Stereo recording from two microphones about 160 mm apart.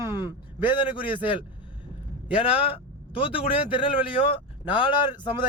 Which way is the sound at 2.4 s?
35° left (ahead or behind).